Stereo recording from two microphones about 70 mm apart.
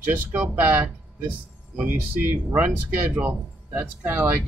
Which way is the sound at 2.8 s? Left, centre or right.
Right.